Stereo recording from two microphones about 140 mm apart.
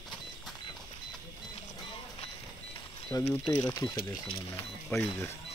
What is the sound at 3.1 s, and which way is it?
Speech, 20° left (ahead or behind).